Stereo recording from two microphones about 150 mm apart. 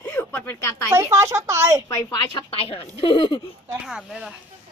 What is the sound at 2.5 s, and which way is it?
Speech, 40° left (ahead or behind).